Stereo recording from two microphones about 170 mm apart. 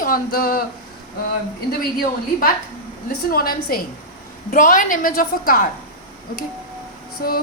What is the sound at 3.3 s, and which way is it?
A woman's voice, 60° left (ahead or behind).